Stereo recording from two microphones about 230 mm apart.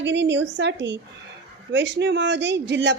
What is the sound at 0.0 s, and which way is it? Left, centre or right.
A woman's voice, right.